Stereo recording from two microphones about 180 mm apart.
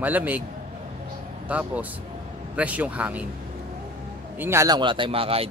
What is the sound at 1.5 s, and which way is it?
Speech, 10° right (ahead or behind).